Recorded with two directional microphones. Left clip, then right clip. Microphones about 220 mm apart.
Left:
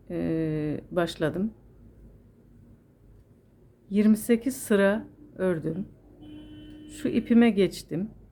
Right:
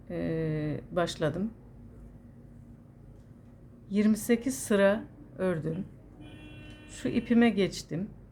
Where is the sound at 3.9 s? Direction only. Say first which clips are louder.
Left 4 dB; 15° left (ahead or behind).